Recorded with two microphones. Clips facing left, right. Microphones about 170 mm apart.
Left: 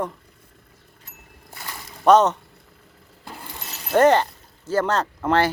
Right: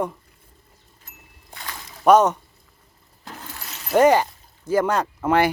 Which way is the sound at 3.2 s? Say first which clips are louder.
Even; 10° left (ahead or behind).